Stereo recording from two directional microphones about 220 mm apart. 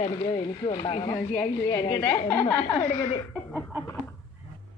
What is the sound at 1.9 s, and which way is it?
Laughter, 10° left (ahead or behind).